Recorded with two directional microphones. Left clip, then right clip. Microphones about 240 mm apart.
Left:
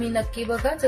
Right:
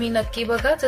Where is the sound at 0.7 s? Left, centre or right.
Right.